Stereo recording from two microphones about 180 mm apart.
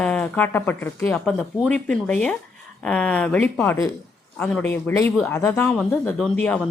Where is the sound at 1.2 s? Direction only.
Centre (ahead or behind).